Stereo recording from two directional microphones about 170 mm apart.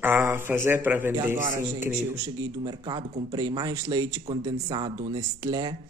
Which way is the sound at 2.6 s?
25° right (ahead or behind).